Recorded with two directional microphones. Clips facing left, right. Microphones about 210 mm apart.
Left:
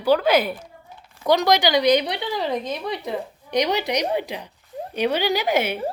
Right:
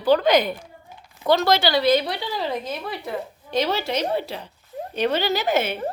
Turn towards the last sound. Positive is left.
turn(degrees=10)  # may be behind; listen again after turning